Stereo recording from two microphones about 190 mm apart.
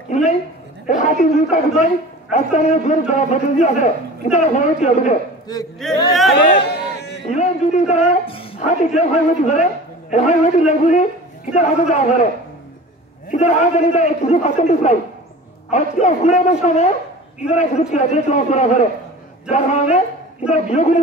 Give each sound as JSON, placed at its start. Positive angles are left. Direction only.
{"t": 0.1, "sound": "a woman's voice", "side_deg": 40}
{"t": 5.5, "sound": "speech", "side_deg": 20}
{"t": 6.5, "sound": "a sound", "side_deg": 60}
{"t": 7.2, "sound": "a man's voice", "side_deg": 35}
{"t": 13.3, "sound": "a man's voice", "side_deg": 35}